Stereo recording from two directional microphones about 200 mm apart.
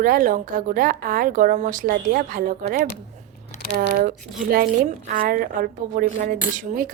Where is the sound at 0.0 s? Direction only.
45° right (ahead or behind).